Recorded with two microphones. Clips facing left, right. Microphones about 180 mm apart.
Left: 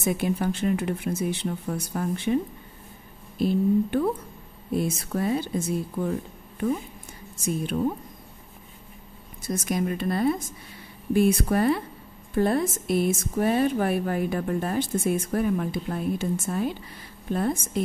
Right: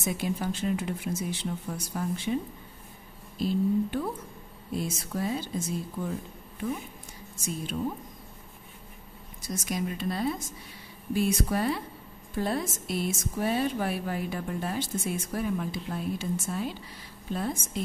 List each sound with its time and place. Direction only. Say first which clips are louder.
0.0 s speech: left 5 dB; 55° left (ahead or behind)
3.3 s speech: left 4 dB; 55° left (ahead or behind)
9.4 s speech: left 5 dB; 55° left (ahead or behind)